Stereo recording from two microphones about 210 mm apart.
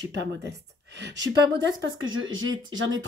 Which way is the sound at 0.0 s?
55° right (ahead or behind).